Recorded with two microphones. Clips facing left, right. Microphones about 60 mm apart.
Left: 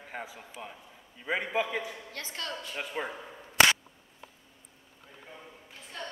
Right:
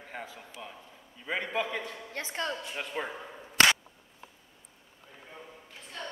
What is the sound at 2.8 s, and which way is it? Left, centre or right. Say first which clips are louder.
Speech: left 2 dB; centre.